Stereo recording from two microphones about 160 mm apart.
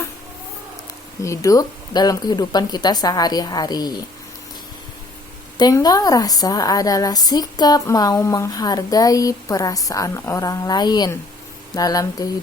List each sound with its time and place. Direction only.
1.2 s a woman's voice: 20° left (ahead or behind)
5.5 s a woman's voice: 25° left (ahead or behind)